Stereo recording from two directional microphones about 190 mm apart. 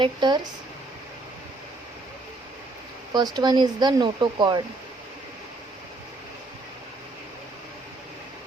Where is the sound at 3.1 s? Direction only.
20° right (ahead or behind).